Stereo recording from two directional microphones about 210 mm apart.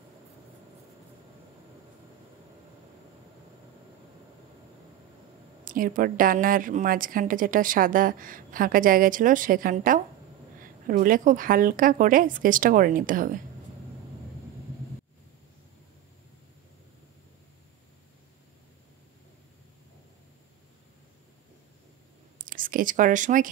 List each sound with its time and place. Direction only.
5.7 s a woman's voice: 40° right (ahead or behind)
22.4 s speech: 40° right (ahead or behind)